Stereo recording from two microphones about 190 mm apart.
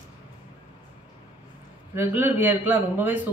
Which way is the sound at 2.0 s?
10° right (ahead or behind).